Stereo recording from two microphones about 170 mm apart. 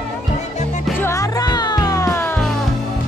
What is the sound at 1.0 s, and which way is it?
Music, 15° left (ahead or behind).